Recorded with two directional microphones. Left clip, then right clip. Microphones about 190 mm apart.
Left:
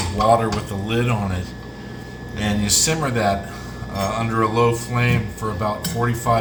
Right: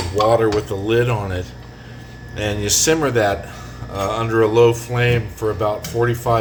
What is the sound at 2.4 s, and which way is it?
Speech, 50° right (ahead or behind).